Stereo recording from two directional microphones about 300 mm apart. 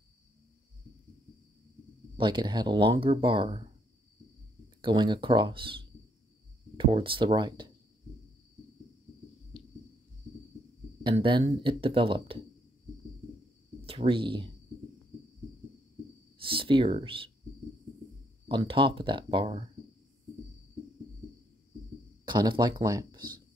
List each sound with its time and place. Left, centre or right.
2.1 s speech: centre
4.8 s speech: centre
11.1 s speech: centre
13.8 s speech: centre
16.3 s speech: centre
18.5 s speech: centre
22.2 s speech: centre